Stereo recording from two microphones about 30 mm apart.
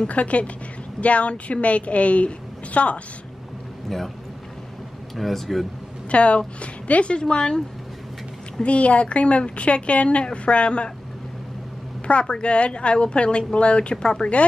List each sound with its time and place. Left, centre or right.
0.1 s a woman's voice: left
3.9 s speech: centre
5.1 s speech: centre
6.0 s a woman's voice: left
8.6 s a woman's voice: left
10.0 s a woman's voice: left
12.1 s a woman's voice: left